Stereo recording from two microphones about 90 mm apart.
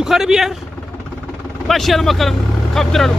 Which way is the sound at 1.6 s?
Centre (ahead or behind).